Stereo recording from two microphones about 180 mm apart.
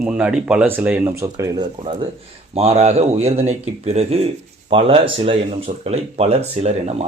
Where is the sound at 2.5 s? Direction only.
35° right (ahead or behind).